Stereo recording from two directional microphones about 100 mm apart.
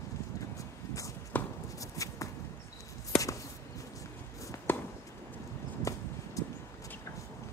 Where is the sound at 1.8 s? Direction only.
35° left (ahead or behind).